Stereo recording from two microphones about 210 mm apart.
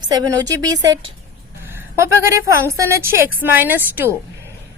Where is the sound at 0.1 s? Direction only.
15° right (ahead or behind).